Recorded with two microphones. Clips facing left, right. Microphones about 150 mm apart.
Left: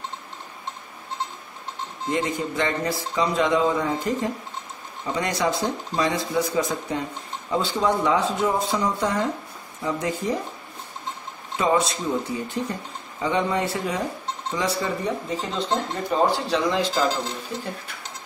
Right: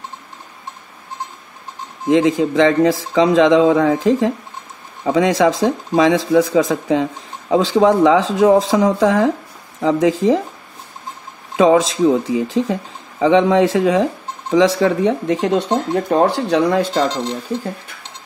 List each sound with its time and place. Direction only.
2.0 s a man's voice: 90° right
11.5 s a man's voice: 90° right; by 16.9 s 60° right (ahead or behind)